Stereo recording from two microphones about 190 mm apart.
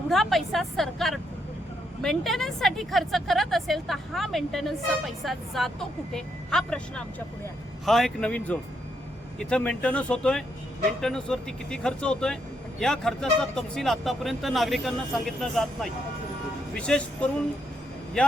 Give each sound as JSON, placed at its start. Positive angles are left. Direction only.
{"t": 0.1, "sound": "speech", "side_deg": 0}